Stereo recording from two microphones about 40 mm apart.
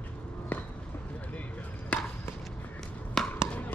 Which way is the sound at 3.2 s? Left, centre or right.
Centre.